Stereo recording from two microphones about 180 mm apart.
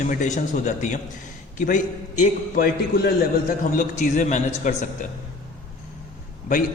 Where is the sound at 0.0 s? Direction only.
45° left (ahead or behind).